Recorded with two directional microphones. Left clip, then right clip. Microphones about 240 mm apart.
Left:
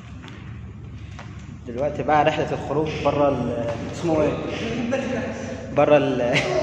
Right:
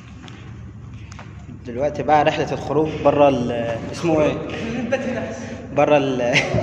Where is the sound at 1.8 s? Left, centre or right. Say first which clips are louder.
Right 3 dB; centre.